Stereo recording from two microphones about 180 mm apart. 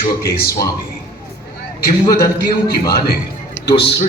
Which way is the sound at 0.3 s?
60° left (ahead or behind).